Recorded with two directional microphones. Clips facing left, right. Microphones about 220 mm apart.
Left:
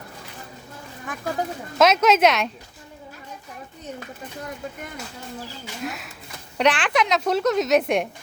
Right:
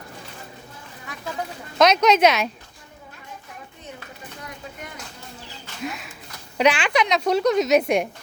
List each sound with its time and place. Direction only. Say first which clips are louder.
1.1 s speech: left 5 dB; 50° left (ahead or behind)
1.8 s a woman's voice: right 1 dB; 5° left (ahead or behind)
5.8 s a woman's voice: right 2 dB; centre (ahead or behind)